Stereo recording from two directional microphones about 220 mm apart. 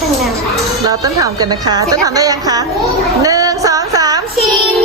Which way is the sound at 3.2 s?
15° right (ahead or behind).